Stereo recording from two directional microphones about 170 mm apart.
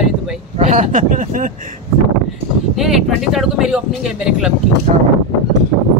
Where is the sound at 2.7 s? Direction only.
Centre (ahead or behind).